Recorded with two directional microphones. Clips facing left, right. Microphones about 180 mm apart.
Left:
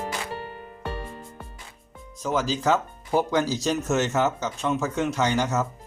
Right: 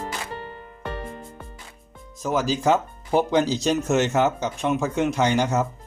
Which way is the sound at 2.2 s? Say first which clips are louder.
Right 2 dB; 10° right (ahead or behind).